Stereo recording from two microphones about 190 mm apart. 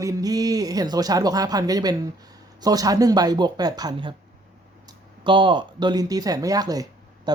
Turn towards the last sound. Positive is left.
turn(degrees=-20)  # may be behind; listen again after turning